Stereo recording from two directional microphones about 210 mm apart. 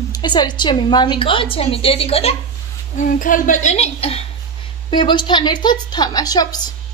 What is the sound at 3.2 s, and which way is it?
A woman's voice, 40° left (ahead or behind).